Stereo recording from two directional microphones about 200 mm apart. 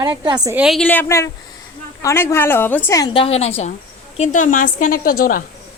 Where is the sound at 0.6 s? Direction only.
Centre (ahead or behind).